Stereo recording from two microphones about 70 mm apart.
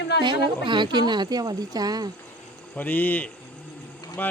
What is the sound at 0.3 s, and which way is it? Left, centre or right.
Speech, right.